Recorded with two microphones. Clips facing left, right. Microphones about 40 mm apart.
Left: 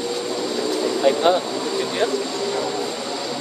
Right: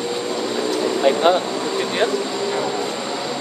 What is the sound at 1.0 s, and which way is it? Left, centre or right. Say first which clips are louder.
Speech: right 1 dB; right.